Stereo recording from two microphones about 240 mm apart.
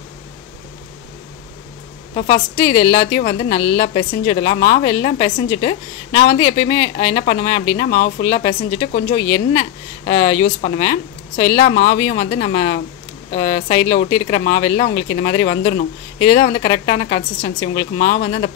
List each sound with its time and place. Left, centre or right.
2.1 s a woman's voice: centre